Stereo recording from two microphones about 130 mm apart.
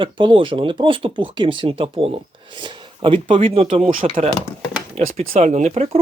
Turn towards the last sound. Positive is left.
turn(degrees=-55)  # may be behind; listen again after turning